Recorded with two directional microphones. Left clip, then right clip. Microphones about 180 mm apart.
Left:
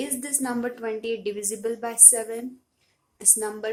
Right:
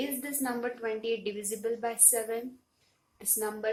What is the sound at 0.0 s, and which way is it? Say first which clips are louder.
A woman's voice: left 4 dB; 35° left (ahead or behind).